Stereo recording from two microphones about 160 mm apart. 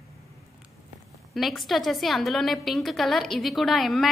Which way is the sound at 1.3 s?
Centre (ahead or behind).